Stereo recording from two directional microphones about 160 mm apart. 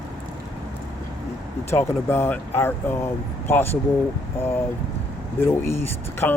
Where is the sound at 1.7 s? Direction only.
15° left (ahead or behind).